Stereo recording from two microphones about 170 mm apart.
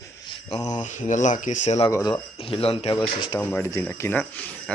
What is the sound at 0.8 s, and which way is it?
Speech, 45° left (ahead or behind).